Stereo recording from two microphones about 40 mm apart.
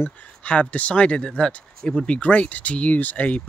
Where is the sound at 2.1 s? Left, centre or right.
Left.